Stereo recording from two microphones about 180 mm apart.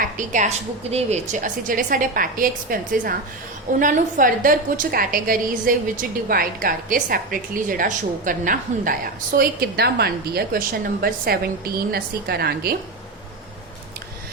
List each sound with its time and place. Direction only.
0.0 s a woman's voice: 45° right (ahead or behind)